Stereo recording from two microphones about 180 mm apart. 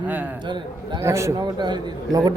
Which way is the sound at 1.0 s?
15° right (ahead or behind).